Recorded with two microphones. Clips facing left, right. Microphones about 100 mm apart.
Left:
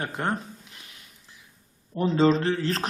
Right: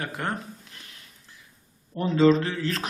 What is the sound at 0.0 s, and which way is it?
Speech, 25° left (ahead or behind).